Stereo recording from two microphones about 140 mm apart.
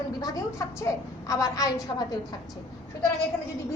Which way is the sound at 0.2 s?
25° left (ahead or behind).